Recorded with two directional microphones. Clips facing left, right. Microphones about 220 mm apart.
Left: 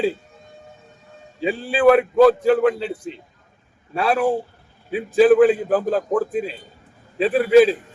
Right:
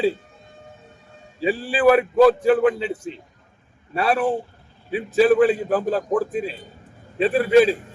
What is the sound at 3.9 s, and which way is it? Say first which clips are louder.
A man's voice: left 1 dB; centre (ahead or behind).